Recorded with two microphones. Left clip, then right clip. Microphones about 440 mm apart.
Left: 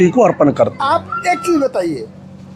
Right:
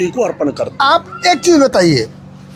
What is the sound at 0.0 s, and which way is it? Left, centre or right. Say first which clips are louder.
Speech: left 5 dB; left.